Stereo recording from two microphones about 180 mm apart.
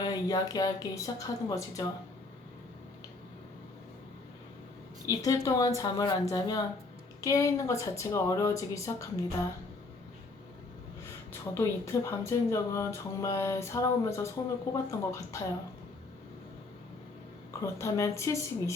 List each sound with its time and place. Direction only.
0.0 s speech: 20° left (ahead or behind)
5.2 s speech: 20° left (ahead or behind)
11.3 s speech: 15° left (ahead or behind)
17.5 s speech: 15° left (ahead or behind)